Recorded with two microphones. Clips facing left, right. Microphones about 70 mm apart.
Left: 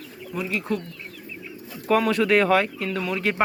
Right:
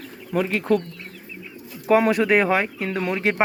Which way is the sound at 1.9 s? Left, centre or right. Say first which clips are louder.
Right 3 dB; right.